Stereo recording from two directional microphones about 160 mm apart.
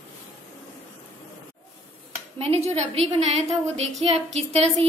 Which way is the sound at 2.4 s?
40° right (ahead or behind).